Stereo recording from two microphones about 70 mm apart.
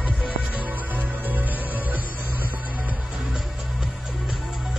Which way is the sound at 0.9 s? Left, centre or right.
Right.